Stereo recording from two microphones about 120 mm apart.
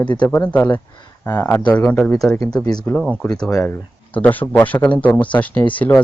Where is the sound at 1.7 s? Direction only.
10° left (ahead or behind).